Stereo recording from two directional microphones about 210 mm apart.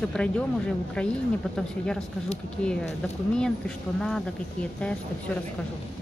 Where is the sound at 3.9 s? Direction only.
Centre (ahead or behind).